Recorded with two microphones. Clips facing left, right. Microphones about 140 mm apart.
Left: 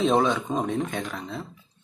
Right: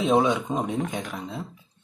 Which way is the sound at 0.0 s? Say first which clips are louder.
Right 1 dB; 10° right (ahead or behind).